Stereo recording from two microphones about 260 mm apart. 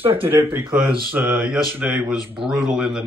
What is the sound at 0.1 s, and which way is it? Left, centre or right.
Speech, centre.